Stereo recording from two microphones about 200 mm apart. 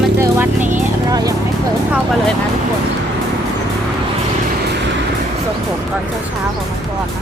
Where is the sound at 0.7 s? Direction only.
15° right (ahead or behind).